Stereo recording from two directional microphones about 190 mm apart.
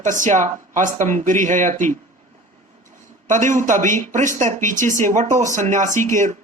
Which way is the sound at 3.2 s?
40° right (ahead or behind).